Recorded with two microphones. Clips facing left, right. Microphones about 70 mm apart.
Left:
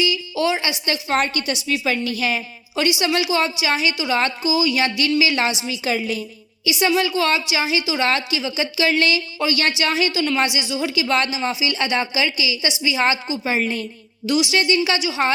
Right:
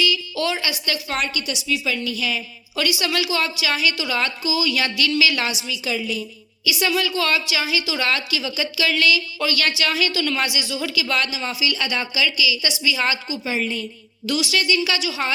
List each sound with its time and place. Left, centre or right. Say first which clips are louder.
0.0 s a woman's voice: left 2 dB; centre; by 2.4 s left
2.7 s speech: left 3 dB; left
6.7 s speech: left 3 dB; left
13.5 s a woman's voice: left 3 dB; left
14.3 s speech: left 3 dB; left